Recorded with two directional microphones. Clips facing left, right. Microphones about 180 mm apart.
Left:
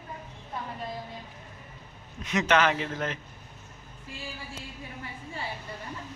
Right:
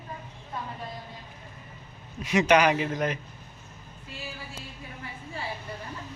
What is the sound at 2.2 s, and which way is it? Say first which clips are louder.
Speech: right 3 dB; 10° right (ahead or behind).